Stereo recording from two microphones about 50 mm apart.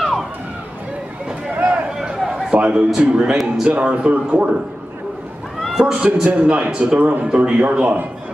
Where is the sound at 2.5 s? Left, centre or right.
Right.